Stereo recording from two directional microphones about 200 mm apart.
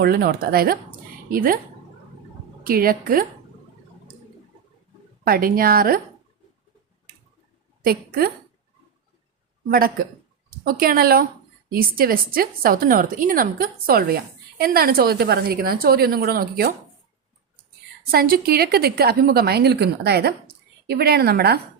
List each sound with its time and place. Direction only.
0.0 s a woman's voice: 50° right (ahead or behind)
2.6 s a woman's voice: 45° right (ahead or behind)
5.2 s a woman's voice: 45° right (ahead or behind)
7.9 s a woman's voice: 50° right (ahead or behind)
9.6 s a woman's voice: 45° right (ahead or behind)
18.1 s a woman's voice: 50° right (ahead or behind)